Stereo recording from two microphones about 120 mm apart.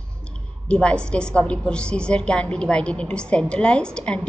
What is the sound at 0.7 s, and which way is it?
A woman's voice, 10° left (ahead or behind).